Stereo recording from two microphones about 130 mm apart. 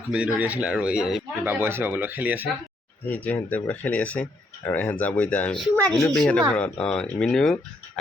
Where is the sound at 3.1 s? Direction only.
10° left (ahead or behind).